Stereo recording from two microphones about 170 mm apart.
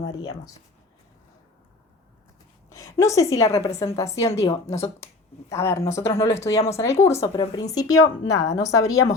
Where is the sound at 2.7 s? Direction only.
20° left (ahead or behind).